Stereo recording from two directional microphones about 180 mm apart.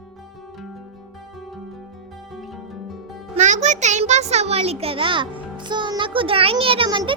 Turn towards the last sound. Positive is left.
turn(degrees=-25)  # may be behind; listen again after turning